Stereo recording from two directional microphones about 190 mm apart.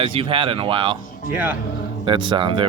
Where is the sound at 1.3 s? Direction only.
10° right (ahead or behind).